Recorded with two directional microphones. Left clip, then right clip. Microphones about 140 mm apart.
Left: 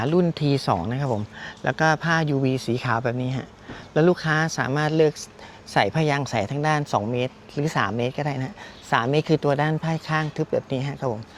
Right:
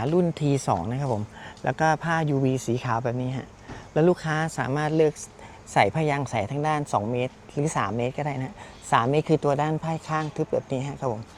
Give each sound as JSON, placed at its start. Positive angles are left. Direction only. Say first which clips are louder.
{"t": 0.0, "sound": "speech", "louder": "left 2 dB", "side_deg": 10}